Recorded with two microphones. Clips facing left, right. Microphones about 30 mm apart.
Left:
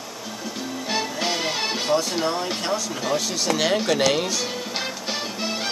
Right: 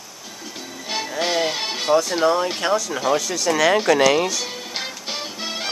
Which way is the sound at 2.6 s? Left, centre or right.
Right.